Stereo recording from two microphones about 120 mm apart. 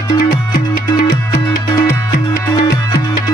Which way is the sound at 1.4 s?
35° left (ahead or behind).